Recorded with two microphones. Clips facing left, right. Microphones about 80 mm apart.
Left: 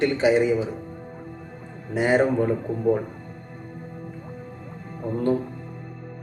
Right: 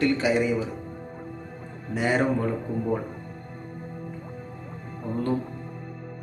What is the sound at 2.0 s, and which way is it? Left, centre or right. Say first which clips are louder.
Speech: left 4 dB; left.